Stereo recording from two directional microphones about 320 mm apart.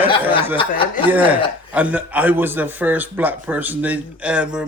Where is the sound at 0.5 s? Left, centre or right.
Centre.